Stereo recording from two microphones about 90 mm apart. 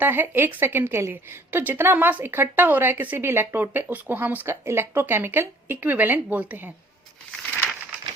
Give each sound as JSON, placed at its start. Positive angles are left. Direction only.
{"t": 0.0, "sound": "a woman's voice", "side_deg": -25}